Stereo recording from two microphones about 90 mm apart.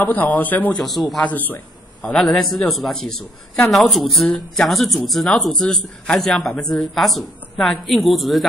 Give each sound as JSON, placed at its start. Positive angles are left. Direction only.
{"t": 0.0, "sound": "a man's voice", "side_deg": 20}
{"t": 0.7, "sound": "a woman's voice", "side_deg": 0}
{"t": 1.2, "sound": "a man's voice", "side_deg": 20}
{"t": 2.1, "sound": "a woman's voice", "side_deg": 0}